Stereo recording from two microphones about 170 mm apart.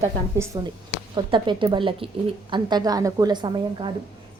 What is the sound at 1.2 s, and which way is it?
Speech, 25° right (ahead or behind).